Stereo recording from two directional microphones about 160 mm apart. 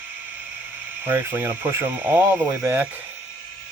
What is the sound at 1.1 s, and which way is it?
Speech, 15° right (ahead or behind).